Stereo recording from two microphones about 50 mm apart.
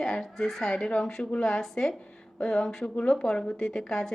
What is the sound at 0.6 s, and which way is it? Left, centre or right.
Speech, centre.